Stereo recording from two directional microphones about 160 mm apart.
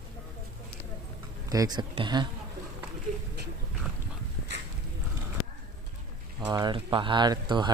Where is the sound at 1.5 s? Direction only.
25° right (ahead or behind).